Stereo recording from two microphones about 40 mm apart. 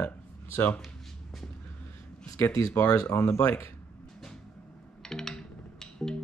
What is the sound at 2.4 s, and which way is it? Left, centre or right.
Speech, left.